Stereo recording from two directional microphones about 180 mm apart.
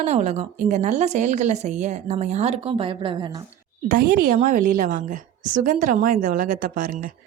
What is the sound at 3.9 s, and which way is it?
A woman's voice, 50° right (ahead or behind).